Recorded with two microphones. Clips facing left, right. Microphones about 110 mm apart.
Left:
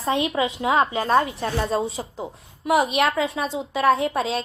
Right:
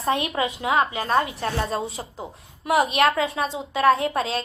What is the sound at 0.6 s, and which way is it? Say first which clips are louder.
Speech: left 2 dB; 30° left (ahead or behind).